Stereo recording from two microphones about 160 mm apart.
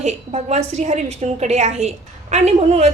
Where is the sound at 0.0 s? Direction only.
45° right (ahead or behind).